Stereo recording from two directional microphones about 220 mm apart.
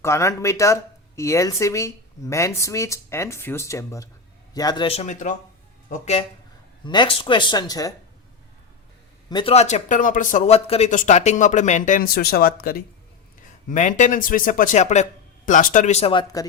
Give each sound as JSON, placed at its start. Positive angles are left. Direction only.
{"t": 0.0, "sound": "speech", "side_deg": 15}
{"t": 9.3, "sound": "speech", "side_deg": 25}